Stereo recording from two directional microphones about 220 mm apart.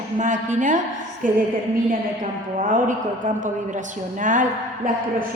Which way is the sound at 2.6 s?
35° right (ahead or behind).